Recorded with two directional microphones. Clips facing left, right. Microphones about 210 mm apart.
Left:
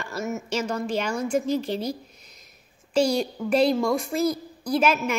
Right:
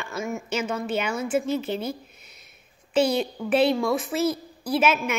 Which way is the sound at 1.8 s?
35° left (ahead or behind).